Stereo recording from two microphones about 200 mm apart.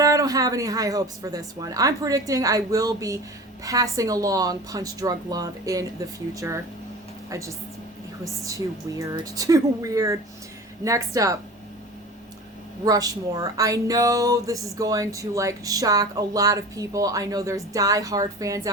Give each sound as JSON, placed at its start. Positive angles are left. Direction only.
{"t": 0.0, "sound": "a woman's voice", "side_deg": -15}
{"t": 12.8, "sound": "speech", "side_deg": -20}